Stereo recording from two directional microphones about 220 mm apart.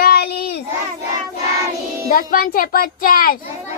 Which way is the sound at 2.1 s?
40° left (ahead or behind).